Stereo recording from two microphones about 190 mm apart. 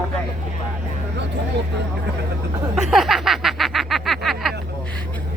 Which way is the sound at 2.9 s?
Centre (ahead or behind).